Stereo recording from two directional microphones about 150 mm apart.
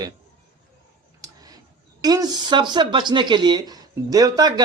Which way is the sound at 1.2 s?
25° right (ahead or behind).